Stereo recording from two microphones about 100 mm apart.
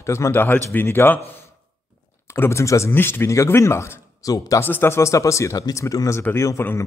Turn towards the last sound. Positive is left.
turn(degrees=25)  # may be behind; listen again after turning